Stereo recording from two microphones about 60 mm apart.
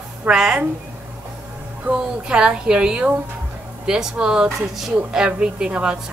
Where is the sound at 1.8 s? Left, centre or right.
Centre.